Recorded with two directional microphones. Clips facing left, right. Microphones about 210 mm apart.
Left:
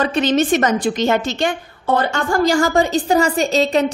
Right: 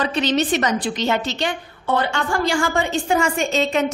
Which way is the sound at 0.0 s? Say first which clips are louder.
Left 4 dB; 50° left (ahead or behind).